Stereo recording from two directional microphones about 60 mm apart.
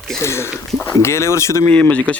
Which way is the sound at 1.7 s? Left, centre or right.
Left.